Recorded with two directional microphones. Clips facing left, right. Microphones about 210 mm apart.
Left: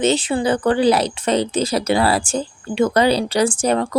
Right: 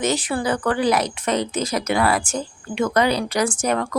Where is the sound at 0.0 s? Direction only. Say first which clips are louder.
Left 4 dB; 25° left (ahead or behind).